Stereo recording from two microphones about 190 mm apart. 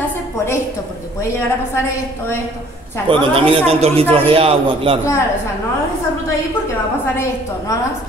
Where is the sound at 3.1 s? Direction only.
30° right (ahead or behind).